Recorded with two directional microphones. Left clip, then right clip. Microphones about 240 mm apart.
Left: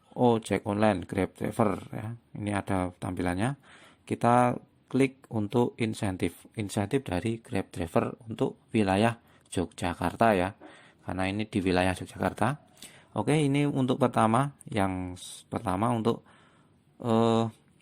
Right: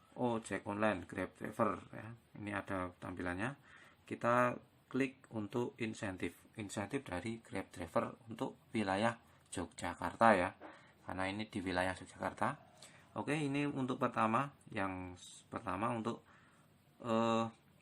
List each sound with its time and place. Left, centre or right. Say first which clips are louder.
0.2 s speech: left 13 dB; left